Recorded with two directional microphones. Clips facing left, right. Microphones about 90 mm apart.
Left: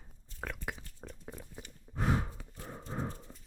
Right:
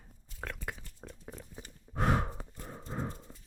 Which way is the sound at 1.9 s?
60° right (ahead or behind).